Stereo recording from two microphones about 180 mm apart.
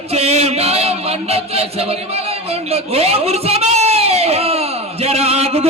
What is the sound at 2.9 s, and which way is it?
A man's voice, 35° right (ahead or behind).